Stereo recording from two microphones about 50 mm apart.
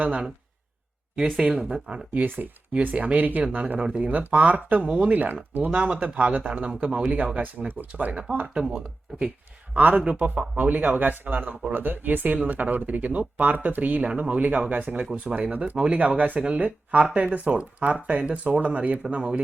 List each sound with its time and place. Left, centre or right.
0.0 s speech: right
1.2 s speech: centre
1.7 s speech: right
2.2 s speech: right
2.8 s speech: right
4.0 s speech: right
8.5 s speech: centre